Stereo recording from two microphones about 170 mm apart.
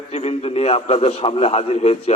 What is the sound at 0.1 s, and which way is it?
A man's voice, 40° left (ahead or behind).